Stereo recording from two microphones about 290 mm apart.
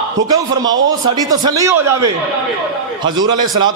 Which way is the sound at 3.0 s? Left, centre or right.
Centre.